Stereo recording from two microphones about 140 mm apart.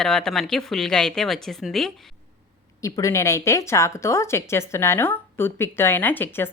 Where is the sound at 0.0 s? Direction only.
5° left (ahead or behind).